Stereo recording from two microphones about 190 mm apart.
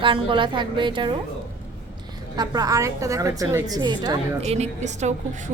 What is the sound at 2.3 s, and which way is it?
A woman's voice, 20° right (ahead or behind).